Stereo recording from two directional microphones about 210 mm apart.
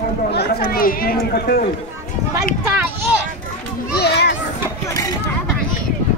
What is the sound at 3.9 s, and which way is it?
Children playing, 50° left (ahead or behind).